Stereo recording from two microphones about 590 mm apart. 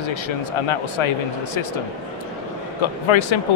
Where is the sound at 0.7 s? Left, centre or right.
Left.